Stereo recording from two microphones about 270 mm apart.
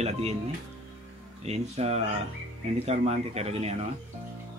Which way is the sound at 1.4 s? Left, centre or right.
Right.